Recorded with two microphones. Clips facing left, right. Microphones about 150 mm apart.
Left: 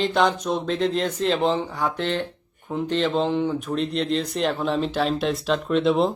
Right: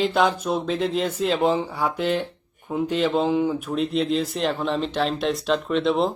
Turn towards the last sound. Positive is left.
turn(degrees=0)  # may be behind; listen again after turning